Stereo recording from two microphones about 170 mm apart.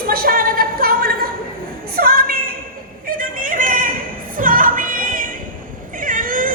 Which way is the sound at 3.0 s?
55° right (ahead or behind).